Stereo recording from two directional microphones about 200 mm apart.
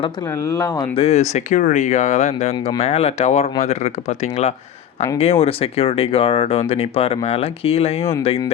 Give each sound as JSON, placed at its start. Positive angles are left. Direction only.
{"t": 0.6, "sound": "speech", "side_deg": 30}
{"t": 5.2, "sound": "speech", "side_deg": 30}